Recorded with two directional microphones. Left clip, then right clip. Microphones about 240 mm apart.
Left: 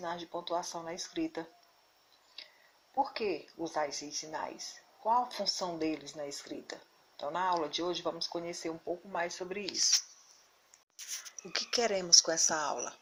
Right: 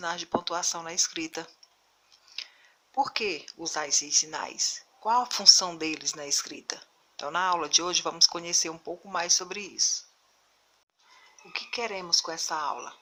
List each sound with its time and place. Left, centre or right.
0.0 s speech: centre
2.9 s speech: centre
11.5 s speech: centre